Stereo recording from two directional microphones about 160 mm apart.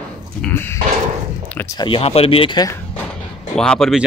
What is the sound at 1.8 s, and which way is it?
Speech, 35° left (ahead or behind).